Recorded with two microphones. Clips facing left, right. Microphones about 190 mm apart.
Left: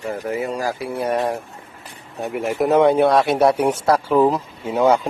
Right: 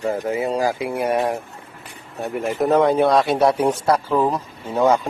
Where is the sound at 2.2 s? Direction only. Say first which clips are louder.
Left 1 dB; 5° left (ahead or behind).